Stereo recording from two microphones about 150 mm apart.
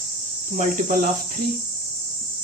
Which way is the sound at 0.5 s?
60° right (ahead or behind).